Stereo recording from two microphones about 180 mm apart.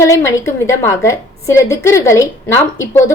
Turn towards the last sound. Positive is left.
turn(degrees=15)  # may be behind; listen again after turning